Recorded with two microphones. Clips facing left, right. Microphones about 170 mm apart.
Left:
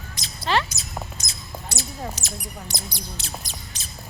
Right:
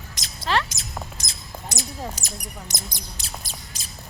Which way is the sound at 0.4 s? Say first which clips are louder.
Left 1 dB; centre (ahead or behind).